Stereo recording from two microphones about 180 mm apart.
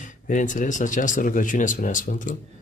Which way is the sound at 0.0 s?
45° left (ahead or behind).